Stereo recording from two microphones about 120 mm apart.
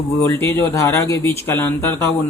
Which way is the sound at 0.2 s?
20° left (ahead or behind).